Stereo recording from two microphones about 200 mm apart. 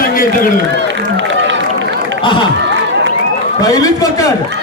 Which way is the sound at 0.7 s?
65° right (ahead or behind).